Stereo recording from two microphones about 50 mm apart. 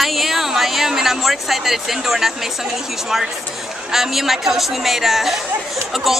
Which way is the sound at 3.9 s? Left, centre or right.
Centre.